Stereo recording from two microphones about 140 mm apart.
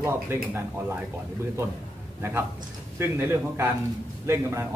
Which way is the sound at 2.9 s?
15° right (ahead or behind).